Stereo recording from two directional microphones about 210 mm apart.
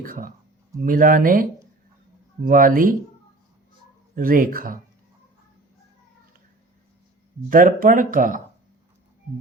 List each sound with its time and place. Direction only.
0.0 s speech: 40° right (ahead or behind)
4.1 s speech: 40° right (ahead or behind)
7.5 s speech: 40° right (ahead or behind)